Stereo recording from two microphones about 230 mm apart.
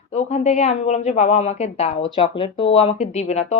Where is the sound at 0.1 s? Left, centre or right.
Left.